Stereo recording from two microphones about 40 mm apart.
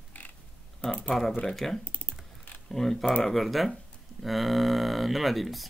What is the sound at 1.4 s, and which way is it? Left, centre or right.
Speech, centre.